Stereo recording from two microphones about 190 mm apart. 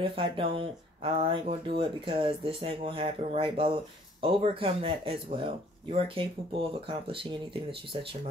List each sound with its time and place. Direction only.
0.0 s speech: 30° right (ahead or behind)